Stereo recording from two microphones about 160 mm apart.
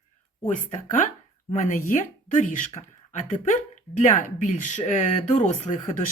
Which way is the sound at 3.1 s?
50° left (ahead or behind).